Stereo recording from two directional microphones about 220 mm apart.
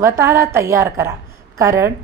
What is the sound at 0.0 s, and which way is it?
A woman's voice, 10° right (ahead or behind).